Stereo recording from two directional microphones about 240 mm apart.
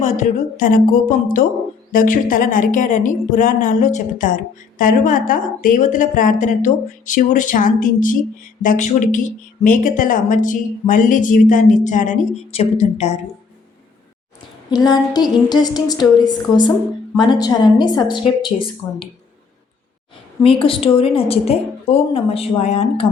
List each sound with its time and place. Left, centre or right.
0.0 s speech: left
14.8 s a sound: centre
18.4 s a woman's voice: left
20.4 s a woman's voice: left